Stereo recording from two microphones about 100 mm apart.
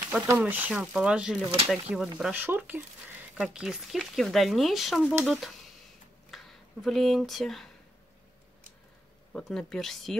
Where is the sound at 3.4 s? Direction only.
5° right (ahead or behind).